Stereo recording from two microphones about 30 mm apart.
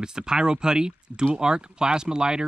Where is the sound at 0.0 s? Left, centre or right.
Right.